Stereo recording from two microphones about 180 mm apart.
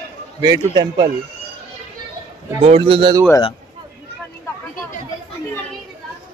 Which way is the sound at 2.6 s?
30° right (ahead or behind).